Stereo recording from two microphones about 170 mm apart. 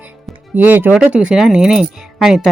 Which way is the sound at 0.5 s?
10° right (ahead or behind).